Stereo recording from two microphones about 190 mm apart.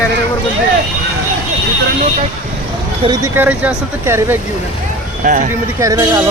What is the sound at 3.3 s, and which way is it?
Speech, 10° right (ahead or behind).